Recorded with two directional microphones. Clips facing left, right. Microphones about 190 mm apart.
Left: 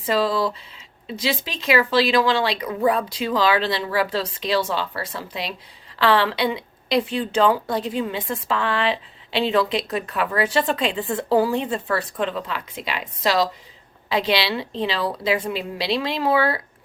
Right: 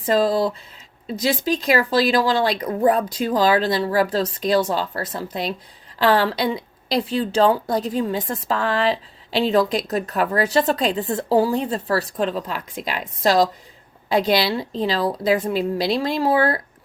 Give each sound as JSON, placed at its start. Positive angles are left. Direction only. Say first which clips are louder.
{"t": 0.0, "sound": "a woman's voice", "louder": "right 3 dB", "side_deg": -45}